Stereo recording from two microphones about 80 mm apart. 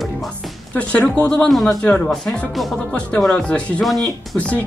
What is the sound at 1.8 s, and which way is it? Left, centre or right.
Speech, centre.